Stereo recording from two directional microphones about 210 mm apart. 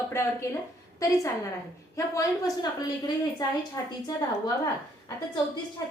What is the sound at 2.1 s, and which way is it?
A woman's voice, 15° left (ahead or behind).